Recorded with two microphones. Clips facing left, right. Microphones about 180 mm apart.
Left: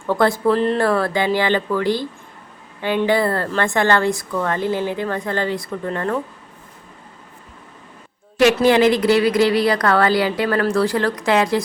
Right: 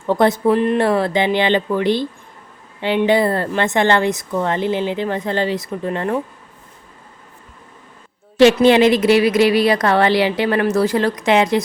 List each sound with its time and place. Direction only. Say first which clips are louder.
0.0 s a woman's voice: right 2 dB; 20° right (ahead or behind)
8.4 s a woman's voice: right 3 dB; 25° right (ahead or behind)